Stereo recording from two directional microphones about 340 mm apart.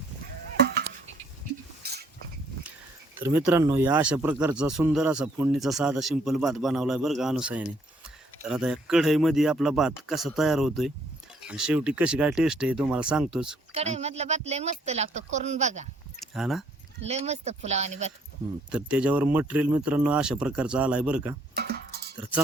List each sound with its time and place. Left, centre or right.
0.7 s a sound: right
1.8 s stir: right
3.2 s speech: centre
13.7 s speech: centre
16.2 s speech: centre
17.1 s speech: centre
18.7 s speech: centre
21.5 s music: right